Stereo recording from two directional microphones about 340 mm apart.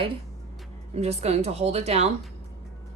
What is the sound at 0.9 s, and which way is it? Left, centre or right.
A woman's voice, centre.